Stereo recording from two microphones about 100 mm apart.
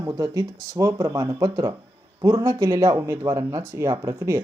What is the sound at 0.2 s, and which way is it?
Speech, 40° right (ahead or behind).